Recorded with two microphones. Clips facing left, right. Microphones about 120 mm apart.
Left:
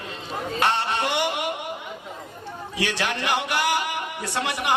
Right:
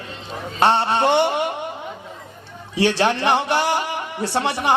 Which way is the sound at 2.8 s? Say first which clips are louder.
Right 9 dB; 30° right (ahead or behind).